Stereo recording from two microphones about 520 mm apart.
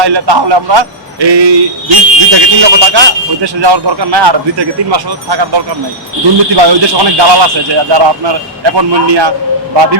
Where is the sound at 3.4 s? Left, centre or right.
Right.